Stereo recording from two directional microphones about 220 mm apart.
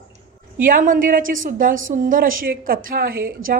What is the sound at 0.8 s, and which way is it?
Speech, 40° right (ahead or behind).